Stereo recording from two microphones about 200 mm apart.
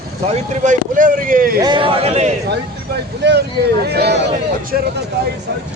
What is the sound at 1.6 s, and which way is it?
Speech, 25° right (ahead or behind).